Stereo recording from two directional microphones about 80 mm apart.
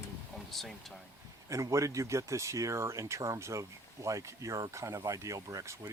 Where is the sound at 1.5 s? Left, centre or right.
Right.